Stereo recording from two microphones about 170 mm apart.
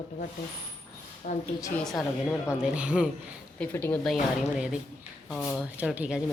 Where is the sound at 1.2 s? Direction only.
55° left (ahead or behind).